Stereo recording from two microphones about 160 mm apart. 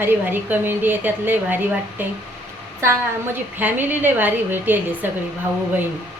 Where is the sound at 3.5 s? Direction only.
10° right (ahead or behind).